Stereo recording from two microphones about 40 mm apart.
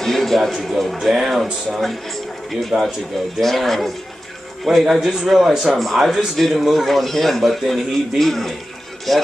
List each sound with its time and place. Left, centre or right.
0.0 s a man's voice: centre
1.0 s a man's voice: centre
2.7 s speech: right
3.3 s speech: centre
4.6 s speech: centre
5.8 s a man's voice: centre